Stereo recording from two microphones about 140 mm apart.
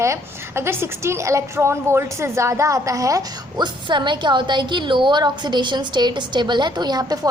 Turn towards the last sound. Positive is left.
turn(degrees=-25)  # may be behind; listen again after turning